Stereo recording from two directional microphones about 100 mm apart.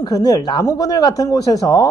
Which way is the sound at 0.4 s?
45° left (ahead or behind).